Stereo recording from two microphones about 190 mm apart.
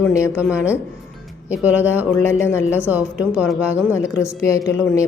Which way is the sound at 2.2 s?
10° left (ahead or behind).